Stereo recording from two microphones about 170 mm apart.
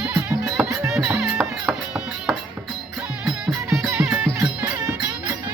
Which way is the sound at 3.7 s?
15° right (ahead or behind).